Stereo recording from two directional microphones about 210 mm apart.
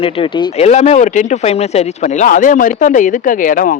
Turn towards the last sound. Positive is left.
turn(degrees=40)  # may be behind; listen again after turning